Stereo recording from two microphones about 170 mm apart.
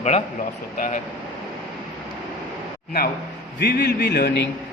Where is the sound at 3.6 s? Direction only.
75° left (ahead or behind).